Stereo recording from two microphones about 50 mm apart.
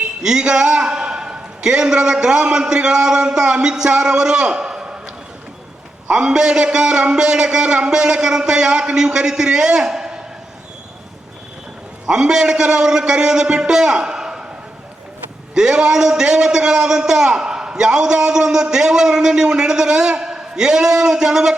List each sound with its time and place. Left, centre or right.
0.2 s a man's voice: centre
6.1 s a man's voice: centre
12.0 s a man's voice: centre
15.5 s a man's voice: centre